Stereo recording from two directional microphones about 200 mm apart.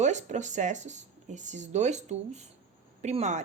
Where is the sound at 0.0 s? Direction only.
35° right (ahead or behind).